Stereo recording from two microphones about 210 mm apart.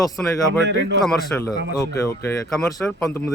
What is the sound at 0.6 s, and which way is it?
Speech, 55° right (ahead or behind).